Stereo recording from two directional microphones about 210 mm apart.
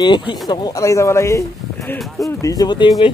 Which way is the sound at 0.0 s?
20° left (ahead or behind).